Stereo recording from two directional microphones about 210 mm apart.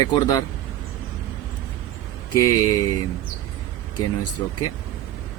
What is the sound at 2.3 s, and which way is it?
Speech, 15° left (ahead or behind).